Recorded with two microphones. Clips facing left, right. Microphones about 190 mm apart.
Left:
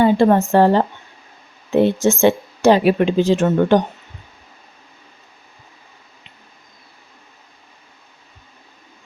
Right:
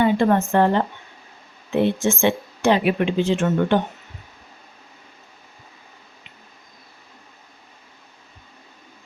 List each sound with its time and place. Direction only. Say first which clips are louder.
0.0 s speech: left 4 dB; 35° left (ahead or behind)